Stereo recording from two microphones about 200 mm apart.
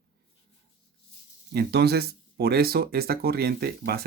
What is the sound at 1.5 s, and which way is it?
Speech, 55° right (ahead or behind).